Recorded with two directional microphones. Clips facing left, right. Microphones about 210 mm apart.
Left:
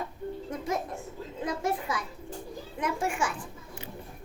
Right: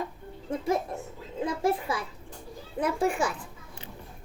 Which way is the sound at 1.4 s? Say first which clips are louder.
Right 4 dB; 30° right (ahead or behind).